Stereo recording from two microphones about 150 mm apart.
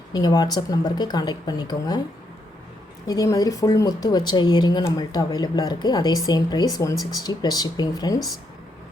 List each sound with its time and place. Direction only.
0.1 s speech: 25° left (ahead or behind)
3.1 s speech: 25° left (ahead or behind)